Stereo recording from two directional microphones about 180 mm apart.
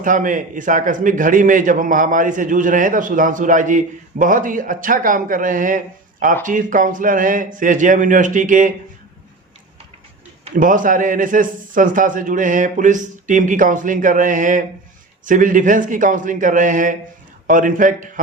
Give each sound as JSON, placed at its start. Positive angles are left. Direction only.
{"t": 0.0, "sound": "a man's voice", "side_deg": -45}
{"t": 10.5, "sound": "a man's voice", "side_deg": -45}